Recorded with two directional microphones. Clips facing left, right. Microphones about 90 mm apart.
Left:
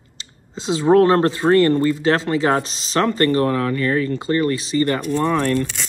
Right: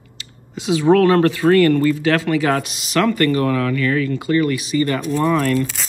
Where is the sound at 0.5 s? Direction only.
30° left (ahead or behind).